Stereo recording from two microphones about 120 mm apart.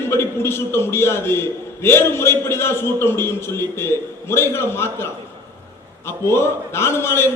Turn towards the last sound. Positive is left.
turn(degrees=20)  # may be behind; listen again after turning